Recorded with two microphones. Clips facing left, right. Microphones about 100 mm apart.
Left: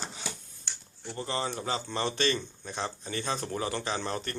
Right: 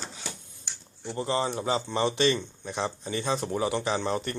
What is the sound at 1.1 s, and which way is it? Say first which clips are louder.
Speech: right 5 dB; 20° right (ahead or behind).